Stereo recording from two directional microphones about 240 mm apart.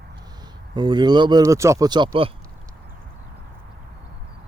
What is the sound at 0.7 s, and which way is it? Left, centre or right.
Speech, centre.